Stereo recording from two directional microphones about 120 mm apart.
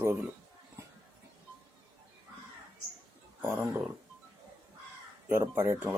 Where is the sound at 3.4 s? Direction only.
20° right (ahead or behind).